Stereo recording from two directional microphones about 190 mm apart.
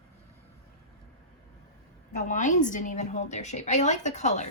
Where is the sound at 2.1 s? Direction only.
40° left (ahead or behind).